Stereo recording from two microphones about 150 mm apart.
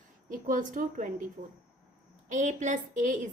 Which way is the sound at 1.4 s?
40° right (ahead or behind).